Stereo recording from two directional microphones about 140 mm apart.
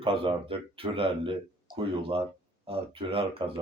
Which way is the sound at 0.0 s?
40° right (ahead or behind).